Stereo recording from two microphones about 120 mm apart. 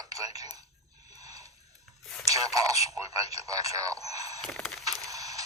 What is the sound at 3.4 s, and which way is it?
Speech, 30° right (ahead or behind).